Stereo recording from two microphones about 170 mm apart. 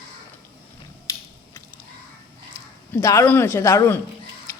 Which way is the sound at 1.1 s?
20° left (ahead or behind).